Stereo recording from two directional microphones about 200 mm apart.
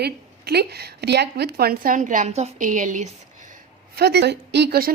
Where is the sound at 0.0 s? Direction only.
55° right (ahead or behind).